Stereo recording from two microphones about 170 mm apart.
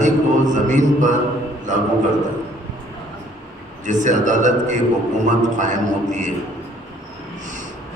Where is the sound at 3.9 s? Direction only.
45° right (ahead or behind).